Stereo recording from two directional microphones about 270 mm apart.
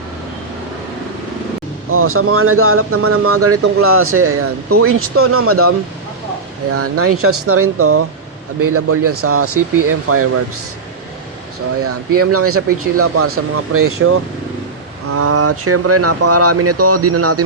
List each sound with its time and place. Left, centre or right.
1.9 s speech: right
12.2 s speech: right